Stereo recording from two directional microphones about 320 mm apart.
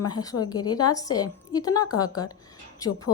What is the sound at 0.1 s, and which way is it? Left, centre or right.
A woman's voice, centre.